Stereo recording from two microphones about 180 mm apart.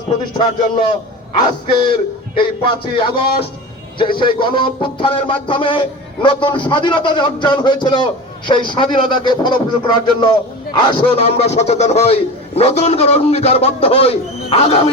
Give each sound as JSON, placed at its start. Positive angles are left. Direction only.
{"t": 1.4, "sound": "a man's voice", "side_deg": 25}